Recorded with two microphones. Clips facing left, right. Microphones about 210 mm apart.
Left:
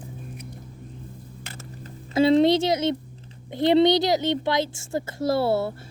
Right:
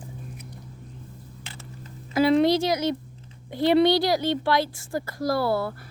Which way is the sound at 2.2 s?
25° left (ahead or behind).